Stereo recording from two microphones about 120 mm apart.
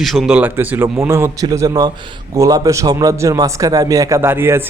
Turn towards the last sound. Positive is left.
turn(degrees=-20)  # may be behind; listen again after turning